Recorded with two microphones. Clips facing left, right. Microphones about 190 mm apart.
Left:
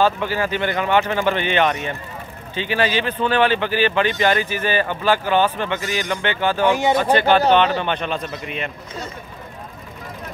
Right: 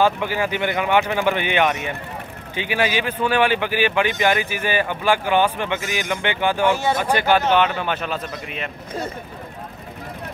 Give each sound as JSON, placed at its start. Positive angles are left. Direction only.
{"t": 0.0, "sound": "a man's voice", "side_deg": -15}
{"t": 6.6, "sound": "speech", "side_deg": 15}
{"t": 7.2, "sound": "a man's voice", "side_deg": -10}